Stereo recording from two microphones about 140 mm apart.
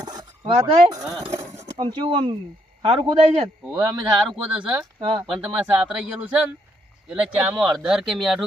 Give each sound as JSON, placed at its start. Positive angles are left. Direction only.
{"t": 0.0, "sound": "a sound", "side_deg": -30}
{"t": 0.6, "sound": "speech", "side_deg": -25}
{"t": 1.3, "sound": "a sound", "side_deg": -20}
{"t": 1.8, "sound": "speech", "side_deg": -35}
{"t": 3.6, "sound": "speech", "side_deg": -5}
{"t": 4.9, "sound": "speech", "side_deg": -40}
{"t": 5.3, "sound": "speech", "side_deg": -10}